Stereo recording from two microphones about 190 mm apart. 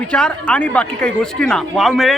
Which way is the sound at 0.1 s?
5° left (ahead or behind).